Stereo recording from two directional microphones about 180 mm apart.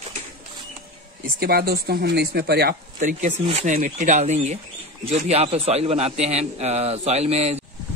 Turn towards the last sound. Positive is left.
turn(degrees=-35)  # may be behind; listen again after turning